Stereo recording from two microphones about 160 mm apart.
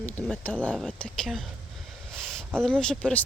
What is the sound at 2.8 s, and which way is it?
Speech, 5° left (ahead or behind).